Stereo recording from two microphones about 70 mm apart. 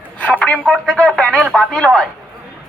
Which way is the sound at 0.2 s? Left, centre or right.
Centre.